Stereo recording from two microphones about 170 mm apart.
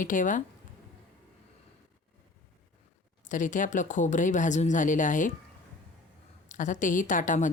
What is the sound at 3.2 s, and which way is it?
A woman's voice, 50° left (ahead or behind).